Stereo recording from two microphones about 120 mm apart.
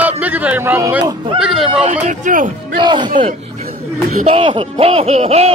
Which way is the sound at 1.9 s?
90° right.